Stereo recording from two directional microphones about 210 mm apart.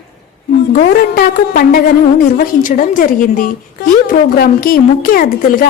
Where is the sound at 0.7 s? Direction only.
40° left (ahead or behind).